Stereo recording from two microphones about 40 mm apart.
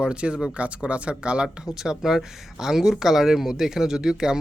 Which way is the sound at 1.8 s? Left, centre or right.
Centre.